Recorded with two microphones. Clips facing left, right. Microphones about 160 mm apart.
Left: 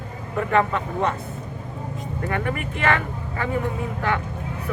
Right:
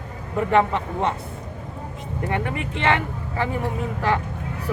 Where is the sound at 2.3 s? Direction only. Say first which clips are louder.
Even; 25° right (ahead or behind).